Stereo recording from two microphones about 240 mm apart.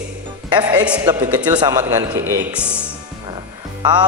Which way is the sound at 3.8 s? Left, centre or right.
Centre.